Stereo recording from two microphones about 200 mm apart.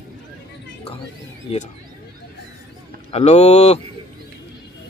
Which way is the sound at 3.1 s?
35° left (ahead or behind).